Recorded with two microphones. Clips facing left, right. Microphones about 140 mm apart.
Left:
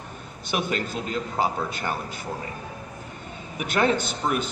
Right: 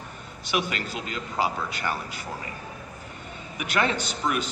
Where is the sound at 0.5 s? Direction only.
40° left (ahead or behind).